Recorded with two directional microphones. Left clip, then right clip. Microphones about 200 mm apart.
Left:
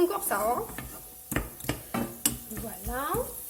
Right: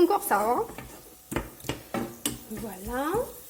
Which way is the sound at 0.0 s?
35° right (ahead or behind).